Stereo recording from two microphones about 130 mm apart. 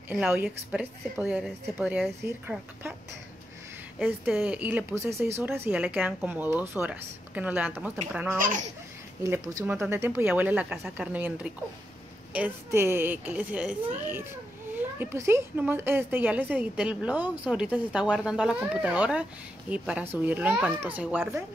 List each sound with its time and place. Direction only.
0.1 s speech: 15° right (ahead or behind)
4.0 s speech: 10° right (ahead or behind)
8.4 s speech: 90° right
9.2 s speech: 25° right (ahead or behind)